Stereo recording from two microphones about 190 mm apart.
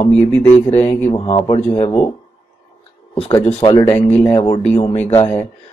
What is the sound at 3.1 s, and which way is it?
Speech, 35° left (ahead or behind).